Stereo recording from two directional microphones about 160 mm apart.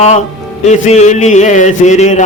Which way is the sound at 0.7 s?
45° left (ahead or behind).